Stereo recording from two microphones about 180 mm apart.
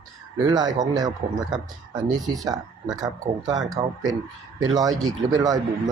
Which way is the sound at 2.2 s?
20° right (ahead or behind).